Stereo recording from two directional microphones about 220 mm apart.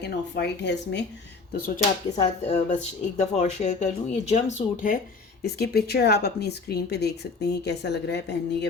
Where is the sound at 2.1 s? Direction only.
25° left (ahead or behind).